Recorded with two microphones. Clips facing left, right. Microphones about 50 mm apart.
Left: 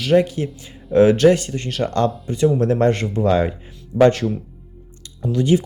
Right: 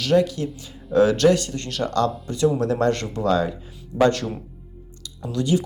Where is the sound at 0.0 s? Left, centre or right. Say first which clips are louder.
Left 3 dB; left.